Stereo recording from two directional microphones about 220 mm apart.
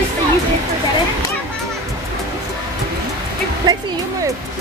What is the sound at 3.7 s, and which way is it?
Speech, 15° right (ahead or behind).